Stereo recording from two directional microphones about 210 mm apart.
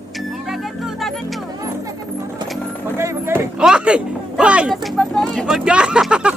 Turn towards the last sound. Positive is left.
turn(degrees=-5)  # may be behind; listen again after turning